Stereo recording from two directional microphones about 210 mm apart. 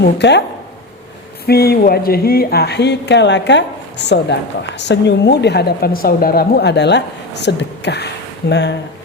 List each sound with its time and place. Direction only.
0.0 s speech: 55° left (ahead or behind)
1.5 s a woman's voice: 50° left (ahead or behind)